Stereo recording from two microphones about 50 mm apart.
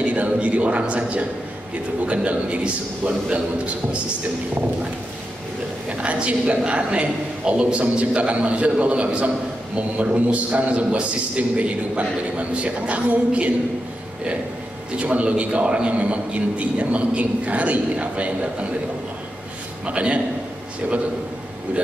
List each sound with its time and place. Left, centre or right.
0.0 s a man's voice: right
5.9 s a man's voice: right
15.0 s a man's voice: right
19.9 s a man's voice: right